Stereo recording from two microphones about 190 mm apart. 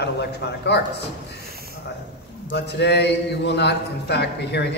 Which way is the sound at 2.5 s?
60° left (ahead or behind).